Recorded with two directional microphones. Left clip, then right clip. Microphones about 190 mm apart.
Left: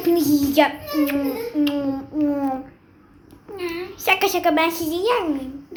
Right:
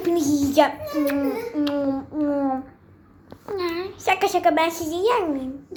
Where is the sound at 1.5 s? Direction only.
10° right (ahead or behind).